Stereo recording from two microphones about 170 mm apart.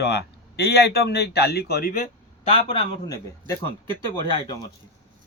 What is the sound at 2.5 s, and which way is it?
A man's voice, 25° left (ahead or behind).